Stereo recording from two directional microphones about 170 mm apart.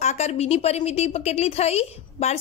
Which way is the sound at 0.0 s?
40° left (ahead or behind).